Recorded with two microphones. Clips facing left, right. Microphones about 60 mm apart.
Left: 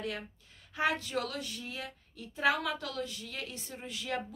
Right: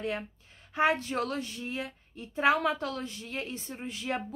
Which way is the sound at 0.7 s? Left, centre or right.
Right.